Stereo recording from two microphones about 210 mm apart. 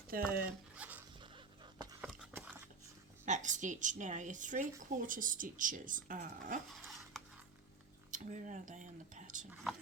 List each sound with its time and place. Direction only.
0.1 s speech: 45° right (ahead or behind)
0.8 s a sound: 10° right (ahead or behind)
1.2 s a sound: 25° right (ahead or behind)
3.2 s a woman's voice: 35° right (ahead or behind)
7.1 s stir: centre (ahead or behind)
8.1 s a woman's voice: 35° right (ahead or behind)